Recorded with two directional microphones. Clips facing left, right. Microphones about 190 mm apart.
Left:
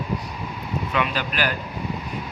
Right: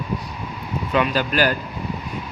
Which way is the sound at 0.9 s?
40° right (ahead or behind).